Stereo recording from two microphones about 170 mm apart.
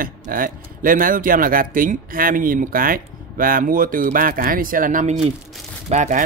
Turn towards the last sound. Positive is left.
turn(degrees=-45)  # may be behind; listen again after turning